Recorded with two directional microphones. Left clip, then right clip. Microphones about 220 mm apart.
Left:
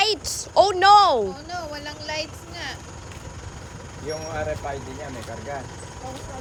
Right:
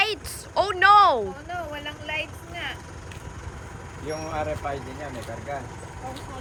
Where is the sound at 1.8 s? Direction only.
80° left.